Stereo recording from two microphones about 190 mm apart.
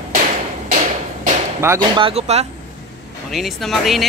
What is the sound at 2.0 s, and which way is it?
Speech, 30° right (ahead or behind).